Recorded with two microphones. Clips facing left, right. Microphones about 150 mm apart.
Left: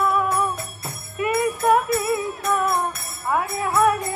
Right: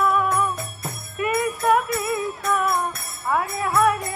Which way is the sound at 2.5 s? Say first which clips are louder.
Left 1 dB; 20° left (ahead or behind).